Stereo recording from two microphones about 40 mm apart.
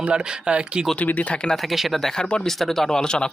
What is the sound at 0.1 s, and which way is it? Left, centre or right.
Speech, right.